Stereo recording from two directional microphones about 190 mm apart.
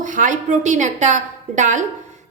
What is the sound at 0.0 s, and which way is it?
A woman's voice, 40° right (ahead or behind).